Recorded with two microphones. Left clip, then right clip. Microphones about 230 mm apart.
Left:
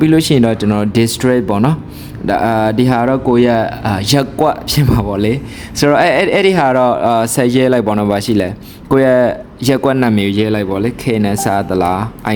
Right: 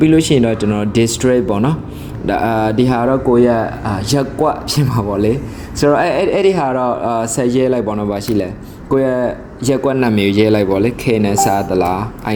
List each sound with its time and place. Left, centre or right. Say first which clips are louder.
0.0 s speech: even; left